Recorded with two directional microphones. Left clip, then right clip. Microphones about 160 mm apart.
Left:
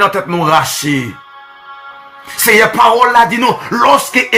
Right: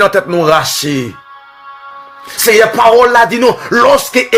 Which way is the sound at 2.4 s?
45° right (ahead or behind).